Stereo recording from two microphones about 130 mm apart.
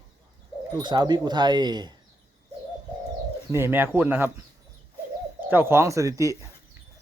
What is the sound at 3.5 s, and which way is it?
Speech, 15° right (ahead or behind).